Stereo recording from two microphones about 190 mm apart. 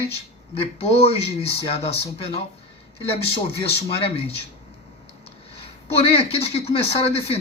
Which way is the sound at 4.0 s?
30° left (ahead or behind).